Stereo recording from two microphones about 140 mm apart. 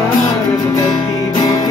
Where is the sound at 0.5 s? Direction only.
25° left (ahead or behind).